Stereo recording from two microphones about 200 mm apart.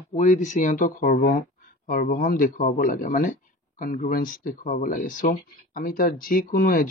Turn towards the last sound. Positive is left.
turn(degrees=45)  # may be behind; listen again after turning